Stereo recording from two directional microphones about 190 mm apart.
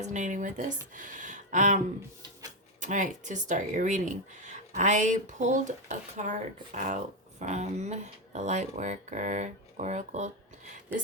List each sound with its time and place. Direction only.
0.0 s speech: 40° right (ahead or behind)
2.8 s speech: 40° right (ahead or behind)